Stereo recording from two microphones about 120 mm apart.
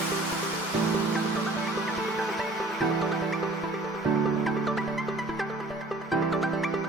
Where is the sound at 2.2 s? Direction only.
Centre (ahead or behind).